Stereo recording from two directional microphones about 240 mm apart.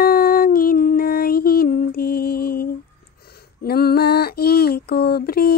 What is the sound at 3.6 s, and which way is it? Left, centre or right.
Female singing, left.